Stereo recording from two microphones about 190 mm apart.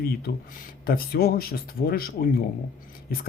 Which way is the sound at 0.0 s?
55° left (ahead or behind).